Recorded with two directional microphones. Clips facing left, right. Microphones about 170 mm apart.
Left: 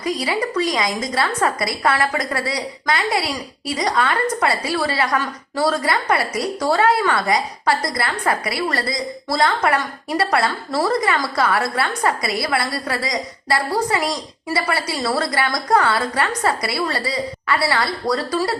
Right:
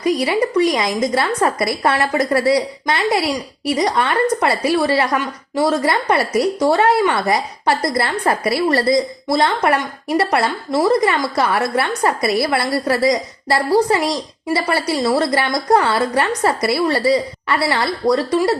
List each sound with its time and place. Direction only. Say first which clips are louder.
0.0 s a woman's voice: right 5 dB; 25° right (ahead or behind)